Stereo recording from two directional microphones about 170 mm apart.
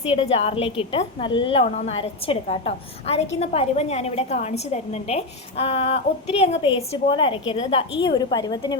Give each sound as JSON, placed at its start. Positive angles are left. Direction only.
{"t": 0.0, "sound": "a woman's voice", "side_deg": 35}